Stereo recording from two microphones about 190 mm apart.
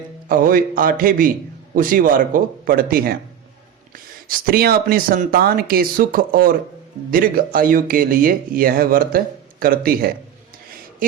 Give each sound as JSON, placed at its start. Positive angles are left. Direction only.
{"t": 0.3, "sound": "speech", "side_deg": -50}